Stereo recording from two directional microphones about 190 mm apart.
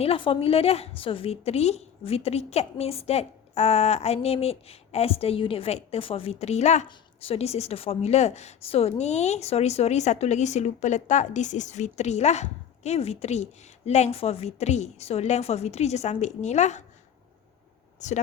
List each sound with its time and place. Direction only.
0.0 s a woman's voice: 30° left (ahead or behind)
18.0 s a woman's voice: 40° left (ahead or behind)